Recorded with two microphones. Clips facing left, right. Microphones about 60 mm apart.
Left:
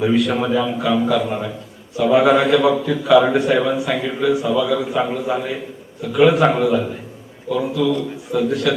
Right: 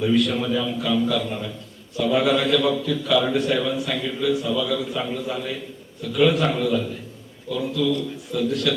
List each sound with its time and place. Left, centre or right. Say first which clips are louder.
0.0 s a man's voice: left 3 dB; left